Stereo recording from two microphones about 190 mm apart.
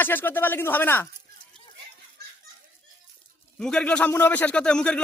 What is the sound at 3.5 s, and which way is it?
Speech, 5° left (ahead or behind).